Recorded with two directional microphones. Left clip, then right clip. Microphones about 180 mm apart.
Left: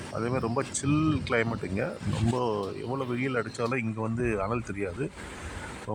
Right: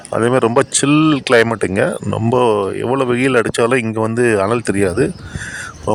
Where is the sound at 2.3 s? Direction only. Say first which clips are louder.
Right 17 dB; 70° right (ahead or behind).